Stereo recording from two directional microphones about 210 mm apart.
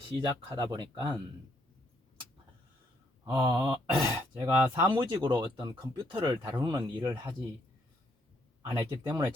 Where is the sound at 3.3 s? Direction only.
20° right (ahead or behind).